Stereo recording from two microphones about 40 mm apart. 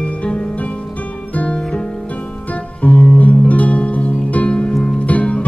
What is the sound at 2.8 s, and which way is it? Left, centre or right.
Music, left.